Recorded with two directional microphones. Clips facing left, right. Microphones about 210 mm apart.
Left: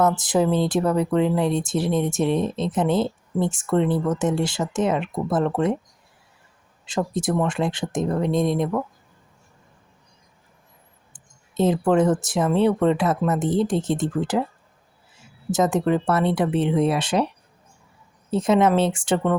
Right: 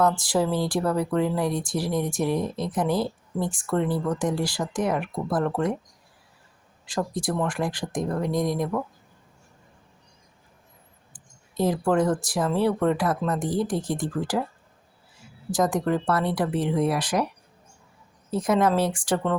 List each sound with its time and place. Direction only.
0.0 s speech: 20° left (ahead or behind)
6.8 s speech: 20° left (ahead or behind)
11.1 s speech: 20° left (ahead or behind)
15.4 s speech: 25° left (ahead or behind)